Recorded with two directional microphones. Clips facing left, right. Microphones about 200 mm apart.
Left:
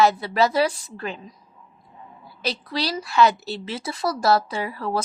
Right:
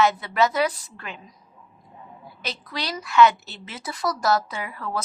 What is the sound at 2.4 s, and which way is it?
A woman's voice, 35° left (ahead or behind).